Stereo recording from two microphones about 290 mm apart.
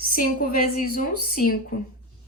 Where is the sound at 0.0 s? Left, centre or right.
Left.